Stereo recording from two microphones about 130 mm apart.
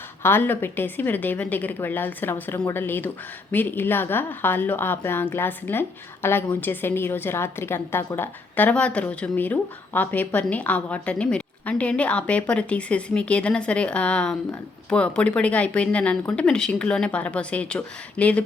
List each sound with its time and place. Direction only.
0.2 s a woman's voice: 15° left (ahead or behind)